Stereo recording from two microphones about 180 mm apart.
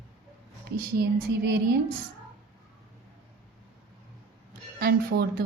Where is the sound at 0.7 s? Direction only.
60° right (ahead or behind).